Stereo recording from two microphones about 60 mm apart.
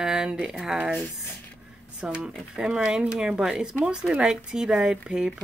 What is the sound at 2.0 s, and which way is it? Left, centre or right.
Speech, centre.